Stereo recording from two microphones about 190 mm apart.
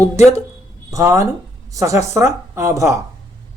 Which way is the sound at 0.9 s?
15° right (ahead or behind).